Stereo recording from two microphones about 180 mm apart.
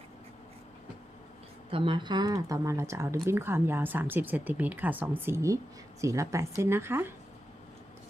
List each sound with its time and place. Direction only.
1.7 s speech: 30° right (ahead or behind); by 7.1 s 15° right (ahead or behind)